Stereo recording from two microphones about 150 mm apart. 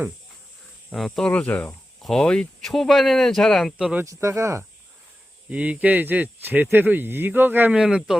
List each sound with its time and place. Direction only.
0.9 s speech: centre (ahead or behind)
4.0 s speech: 20° right (ahead or behind); by 8.2 s 5° right (ahead or behind)